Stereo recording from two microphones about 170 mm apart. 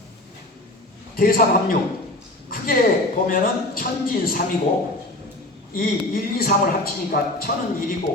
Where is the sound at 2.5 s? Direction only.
55° left (ahead or behind).